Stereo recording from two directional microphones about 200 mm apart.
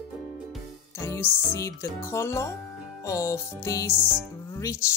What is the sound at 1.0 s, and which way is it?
Speech, 15° left (ahead or behind).